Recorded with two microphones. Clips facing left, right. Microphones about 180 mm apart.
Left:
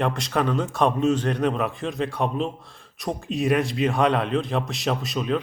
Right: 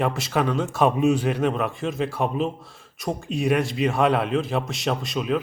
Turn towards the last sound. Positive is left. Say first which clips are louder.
# even
turn(degrees=0)  # may be behind; listen again after turning